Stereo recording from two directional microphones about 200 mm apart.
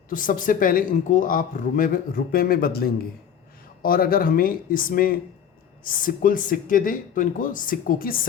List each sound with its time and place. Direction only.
0.1 s speech: 40° left (ahead or behind)